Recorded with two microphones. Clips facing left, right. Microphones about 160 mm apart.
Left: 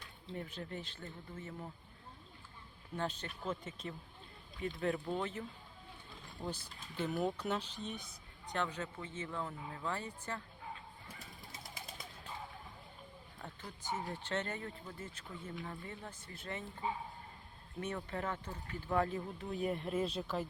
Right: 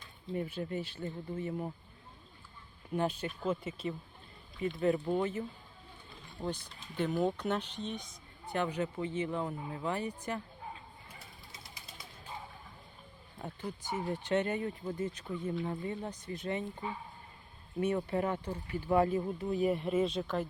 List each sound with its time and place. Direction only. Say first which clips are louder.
0.3 s speech: right 8 dB; 10° right (ahead or behind)
2.9 s speech: right 7 dB; 10° right (ahead or behind)
6.4 s speech: right 5 dB; 5° left (ahead or behind)
8.4 s speech: right 6 dB; 10° right (ahead or behind)
13.4 s speech: right 7 dB; 15° right (ahead or behind)
17.7 s speech: right 9 dB; 10° right (ahead or behind); by 20.4 s 5° left (ahead or behind)